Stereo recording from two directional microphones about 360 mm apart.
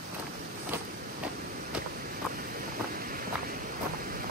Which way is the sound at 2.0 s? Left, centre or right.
Right.